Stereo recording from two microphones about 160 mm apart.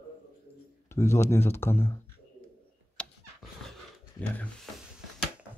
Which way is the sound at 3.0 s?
5° left (ahead or behind).